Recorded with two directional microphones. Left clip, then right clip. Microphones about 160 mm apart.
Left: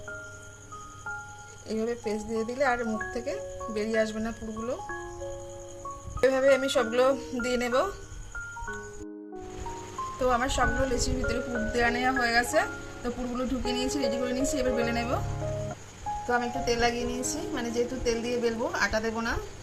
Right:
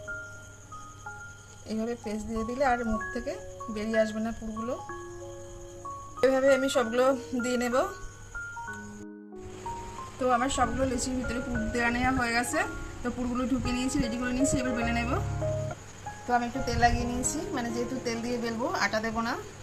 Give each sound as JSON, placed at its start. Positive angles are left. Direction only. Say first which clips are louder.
{"t": 1.6, "sound": "speech", "louder": "left 3 dB", "side_deg": 10}
{"t": 6.1, "sound": "speech", "louder": "left 1 dB", "side_deg": 0}
{"t": 10.2, "sound": "speech", "louder": "even", "side_deg": 5}
{"t": 16.3, "sound": "a woman's voice", "louder": "even", "side_deg": 30}